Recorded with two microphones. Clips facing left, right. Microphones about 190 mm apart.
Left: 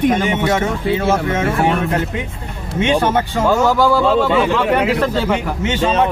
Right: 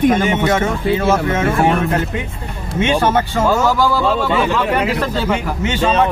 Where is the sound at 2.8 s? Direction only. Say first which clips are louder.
Even; 15° left (ahead or behind).